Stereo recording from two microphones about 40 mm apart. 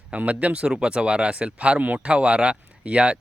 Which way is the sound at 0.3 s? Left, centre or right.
Right.